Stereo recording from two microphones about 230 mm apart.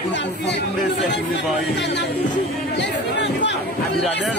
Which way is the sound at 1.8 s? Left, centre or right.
Left.